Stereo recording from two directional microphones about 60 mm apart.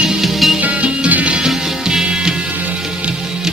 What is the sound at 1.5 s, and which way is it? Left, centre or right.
Music, centre.